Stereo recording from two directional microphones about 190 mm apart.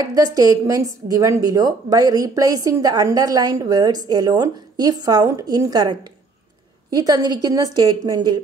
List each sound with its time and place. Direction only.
0.0 s a woman's voice: 20° right (ahead or behind)